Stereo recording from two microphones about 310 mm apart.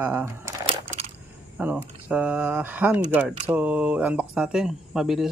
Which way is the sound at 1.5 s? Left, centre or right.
Centre.